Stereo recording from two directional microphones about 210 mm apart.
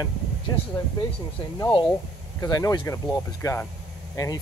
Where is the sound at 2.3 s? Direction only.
15° left (ahead or behind).